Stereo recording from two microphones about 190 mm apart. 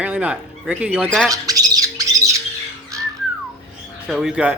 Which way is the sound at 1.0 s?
5° left (ahead or behind).